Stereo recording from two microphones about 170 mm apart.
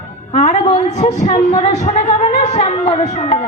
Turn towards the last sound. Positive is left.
turn(degrees=45)  # may be behind; listen again after turning